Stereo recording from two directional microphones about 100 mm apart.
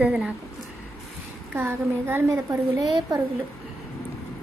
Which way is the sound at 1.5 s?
25° right (ahead or behind).